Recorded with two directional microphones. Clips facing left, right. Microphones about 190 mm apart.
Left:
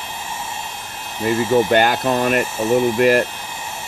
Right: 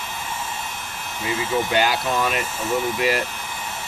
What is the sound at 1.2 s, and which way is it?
Speech, 50° left (ahead or behind).